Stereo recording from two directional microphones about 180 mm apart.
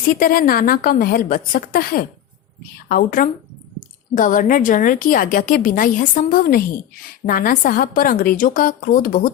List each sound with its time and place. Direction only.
0.1 s a woman's voice: 55° left (ahead or behind)